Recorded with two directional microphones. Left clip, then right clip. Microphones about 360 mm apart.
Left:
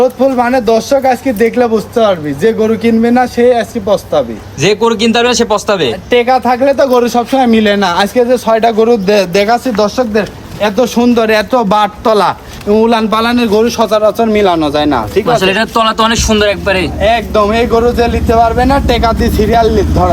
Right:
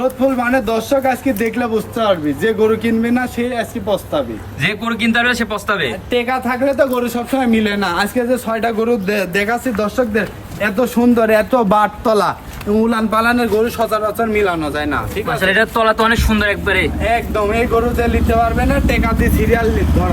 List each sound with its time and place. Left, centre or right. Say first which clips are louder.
0.0 s speech: left 7 dB; left
4.6 s a man's voice: left 9 dB; centre
6.1 s a man's voice: left 10 dB; centre
15.4 s a man's voice: left 4 dB; centre